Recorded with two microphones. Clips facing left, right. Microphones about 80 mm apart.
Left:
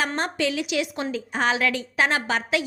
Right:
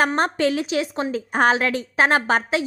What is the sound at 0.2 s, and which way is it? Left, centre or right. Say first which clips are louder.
Speech: right 5 dB; right.